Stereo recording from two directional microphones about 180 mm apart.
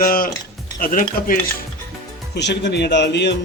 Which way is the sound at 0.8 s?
50° left (ahead or behind).